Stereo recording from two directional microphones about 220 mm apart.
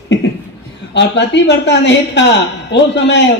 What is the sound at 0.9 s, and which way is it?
A man's voice, 50° left (ahead or behind).